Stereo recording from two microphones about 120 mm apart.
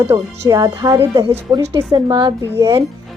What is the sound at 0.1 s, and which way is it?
Speech, 25° right (ahead or behind).